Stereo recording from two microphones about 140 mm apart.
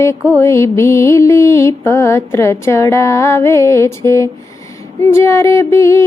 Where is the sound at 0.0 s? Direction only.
20° left (ahead or behind).